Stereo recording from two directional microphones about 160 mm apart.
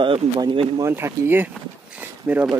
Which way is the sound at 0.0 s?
30° right (ahead or behind).